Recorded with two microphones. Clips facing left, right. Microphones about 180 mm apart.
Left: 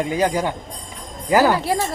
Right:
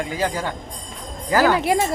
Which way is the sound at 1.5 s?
15° right (ahead or behind).